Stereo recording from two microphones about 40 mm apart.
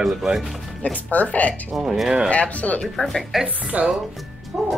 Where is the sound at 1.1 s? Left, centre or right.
Left.